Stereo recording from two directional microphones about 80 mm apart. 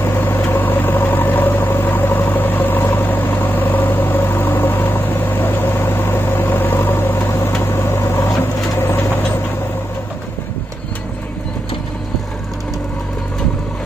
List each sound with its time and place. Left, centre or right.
0.0 s vehicle: left